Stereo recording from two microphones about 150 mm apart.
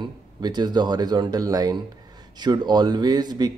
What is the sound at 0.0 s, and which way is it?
Speech, 30° right (ahead or behind).